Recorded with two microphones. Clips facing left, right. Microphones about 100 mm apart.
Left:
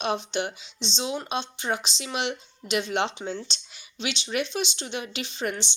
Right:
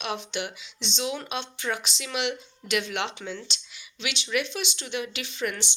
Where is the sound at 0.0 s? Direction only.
30° left (ahead or behind).